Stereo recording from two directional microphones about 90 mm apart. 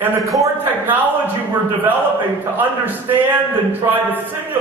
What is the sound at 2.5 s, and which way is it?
A man's voice, 20° right (ahead or behind).